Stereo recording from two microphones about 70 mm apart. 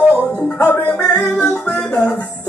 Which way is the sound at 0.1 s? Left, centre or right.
Left.